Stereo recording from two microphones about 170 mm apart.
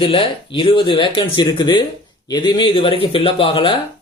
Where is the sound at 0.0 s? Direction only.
30° left (ahead or behind).